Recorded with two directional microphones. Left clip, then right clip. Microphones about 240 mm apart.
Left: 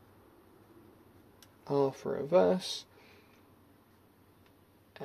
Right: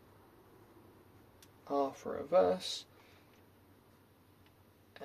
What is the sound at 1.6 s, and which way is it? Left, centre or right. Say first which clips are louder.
Speech: left 4 dB; left.